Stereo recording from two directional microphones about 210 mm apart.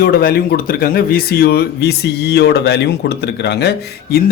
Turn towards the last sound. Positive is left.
turn(degrees=50)  # may be behind; listen again after turning